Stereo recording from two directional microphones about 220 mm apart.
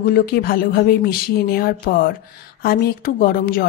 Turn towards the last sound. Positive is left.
turn(degrees=40)  # may be behind; listen again after turning